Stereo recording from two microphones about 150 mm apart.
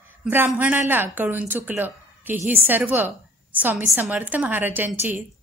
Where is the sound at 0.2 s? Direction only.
15° right (ahead or behind).